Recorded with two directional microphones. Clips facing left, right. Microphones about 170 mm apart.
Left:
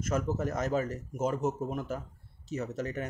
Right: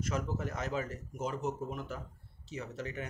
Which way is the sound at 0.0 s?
45° left (ahead or behind).